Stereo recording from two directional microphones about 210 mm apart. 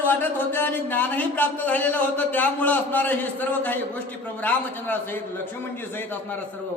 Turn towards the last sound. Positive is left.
turn(degrees=10)  # may be behind; listen again after turning